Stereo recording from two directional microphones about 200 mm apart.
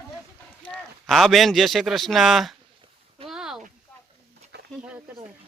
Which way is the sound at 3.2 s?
Centre (ahead or behind).